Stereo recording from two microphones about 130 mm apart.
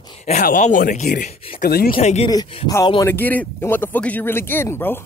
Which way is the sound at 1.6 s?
75° left (ahead or behind).